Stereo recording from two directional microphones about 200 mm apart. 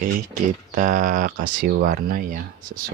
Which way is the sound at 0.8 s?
40° right (ahead or behind).